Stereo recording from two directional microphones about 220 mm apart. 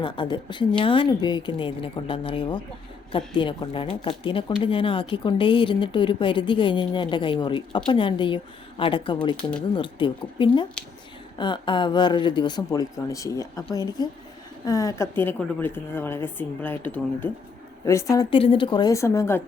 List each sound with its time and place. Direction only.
0.0 s a woman's voice: 20° left (ahead or behind)